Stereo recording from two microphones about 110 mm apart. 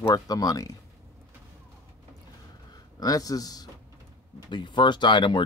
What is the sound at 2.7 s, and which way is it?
A man's voice, 35° left (ahead or behind).